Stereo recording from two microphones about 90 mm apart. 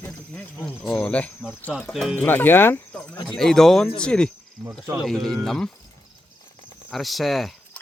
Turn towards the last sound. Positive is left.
turn(degrees=0)  # may be behind; listen again after turning